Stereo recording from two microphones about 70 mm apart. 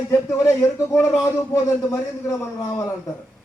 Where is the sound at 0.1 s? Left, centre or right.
Left.